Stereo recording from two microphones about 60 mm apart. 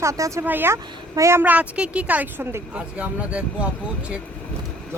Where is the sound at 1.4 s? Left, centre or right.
Right.